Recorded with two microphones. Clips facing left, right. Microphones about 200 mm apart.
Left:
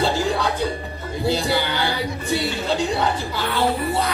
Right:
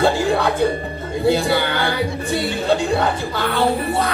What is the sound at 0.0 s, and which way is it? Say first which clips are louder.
Music: right 4 dB; 55° right (ahead or behind).